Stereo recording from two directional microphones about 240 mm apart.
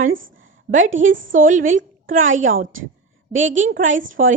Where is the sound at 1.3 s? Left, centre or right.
Right.